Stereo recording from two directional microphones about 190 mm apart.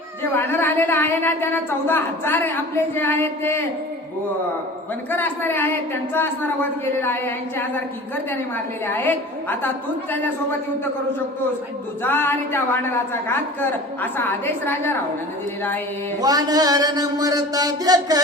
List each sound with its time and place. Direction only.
0.2 s a woman's voice: 10° left (ahead or behind)
5.1 s a woman's voice: 10° left (ahead or behind)
8.9 s a woman's voice: 10° left (ahead or behind)
12.0 s a woman's voice: 10° left (ahead or behind)
16.2 s a sound: 20° right (ahead or behind)